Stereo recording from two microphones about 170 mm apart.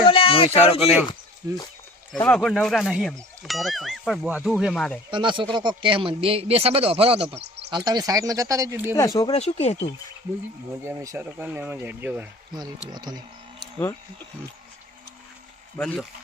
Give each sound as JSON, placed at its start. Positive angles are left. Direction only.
{"t": 0.1, "sound": "a sound", "side_deg": 30}
{"t": 0.8, "sound": "speech", "side_deg": 0}
{"t": 2.2, "sound": "speech", "side_deg": 5}
{"t": 5.1, "sound": "speech", "side_deg": -30}
{"t": 7.4, "sound": "a sound", "side_deg": -80}
{"t": 7.7, "sound": "speech", "side_deg": -25}
{"t": 9.0, "sound": "speech", "side_deg": 20}
{"t": 9.3, "sound": "speech", "side_deg": 40}
{"t": 10.8, "sound": "speech", "side_deg": -15}
{"t": 12.9, "sound": "speech", "side_deg": -25}
{"t": 15.8, "sound": "speech", "side_deg": 5}